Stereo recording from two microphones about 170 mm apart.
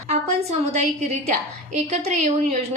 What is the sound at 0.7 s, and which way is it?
A woman's voice, 40° right (ahead or behind).